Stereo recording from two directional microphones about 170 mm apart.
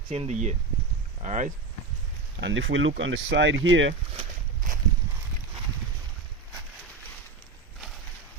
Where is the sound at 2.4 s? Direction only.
90° right.